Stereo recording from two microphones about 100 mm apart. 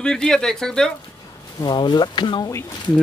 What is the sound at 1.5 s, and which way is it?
Speech, 50° left (ahead or behind).